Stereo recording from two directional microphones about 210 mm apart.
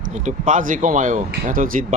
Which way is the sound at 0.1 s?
35° right (ahead or behind).